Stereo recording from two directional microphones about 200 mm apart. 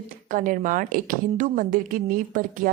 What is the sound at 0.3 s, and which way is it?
A woman's voice, 40° right (ahead or behind).